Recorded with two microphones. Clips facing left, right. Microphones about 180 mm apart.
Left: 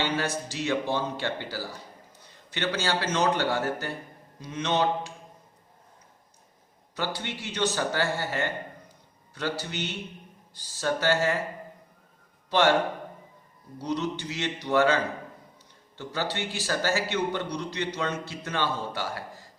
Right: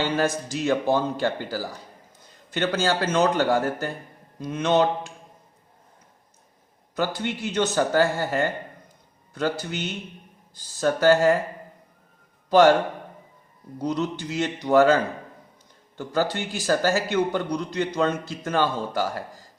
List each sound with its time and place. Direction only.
0.0 s a man's voice: 45° right (ahead or behind)
6.9 s a man's voice: 50° right (ahead or behind)
12.5 s a man's voice: 45° right (ahead or behind)
13.7 s a man's voice: 50° right (ahead or behind)
16.0 s a man's voice: 45° right (ahead or behind)